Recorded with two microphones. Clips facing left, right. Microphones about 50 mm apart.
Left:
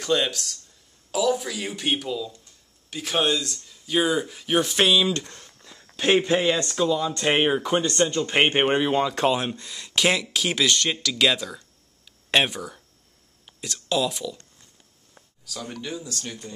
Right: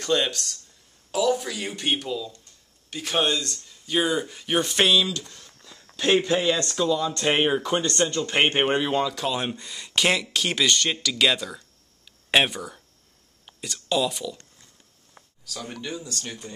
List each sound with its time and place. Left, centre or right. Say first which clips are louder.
0.0 s speech: even; centre
5.1 s speech: left 5 dB; left
5.6 s speech: even; centre
9.4 s speech: even; centre
15.4 s speech: even; centre